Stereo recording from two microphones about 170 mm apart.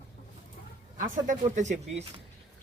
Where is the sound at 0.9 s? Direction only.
50° right (ahead or behind).